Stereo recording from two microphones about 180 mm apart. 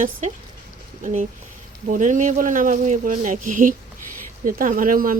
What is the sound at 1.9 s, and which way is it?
Speech, 45° right (ahead or behind).